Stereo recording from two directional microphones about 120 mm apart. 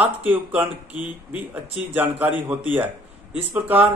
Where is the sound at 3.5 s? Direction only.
15° right (ahead or behind).